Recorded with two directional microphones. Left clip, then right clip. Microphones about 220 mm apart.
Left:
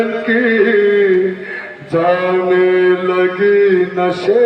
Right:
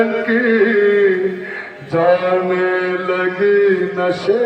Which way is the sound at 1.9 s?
20° left (ahead or behind).